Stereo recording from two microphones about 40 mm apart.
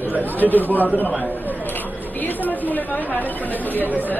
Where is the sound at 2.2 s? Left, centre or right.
Left.